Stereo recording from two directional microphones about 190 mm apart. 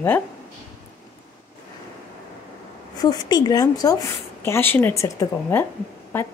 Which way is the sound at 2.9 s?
20° left (ahead or behind).